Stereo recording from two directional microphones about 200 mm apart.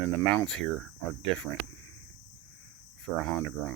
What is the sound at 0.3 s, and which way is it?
Speech, centre (ahead or behind).